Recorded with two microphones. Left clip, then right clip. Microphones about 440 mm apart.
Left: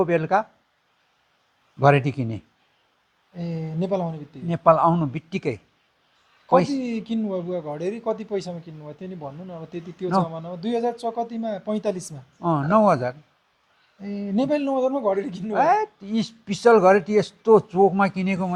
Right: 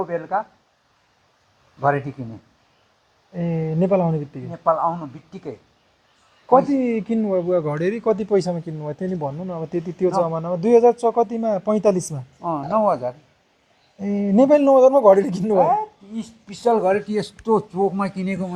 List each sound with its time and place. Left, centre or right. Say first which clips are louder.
0.0 s speech: left 3 dB; left
1.8 s speech: left 2 dB; left
3.3 s speech: right 8 dB; centre
4.5 s speech: left 3 dB; left
6.7 s speech: right 7 dB; centre
12.4 s speech: left 1 dB; left
14.0 s speech: right 9 dB; centre
15.7 s speech: even; left
17.1 s speech: left 4 dB; left